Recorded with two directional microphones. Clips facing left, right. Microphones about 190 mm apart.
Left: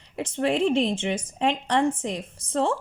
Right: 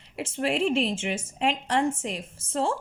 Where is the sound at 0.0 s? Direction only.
35° left (ahead or behind).